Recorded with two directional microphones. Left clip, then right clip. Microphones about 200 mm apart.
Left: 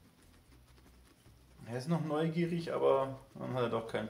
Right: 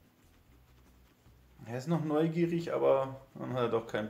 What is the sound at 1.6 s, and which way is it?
Speech, 30° right (ahead or behind).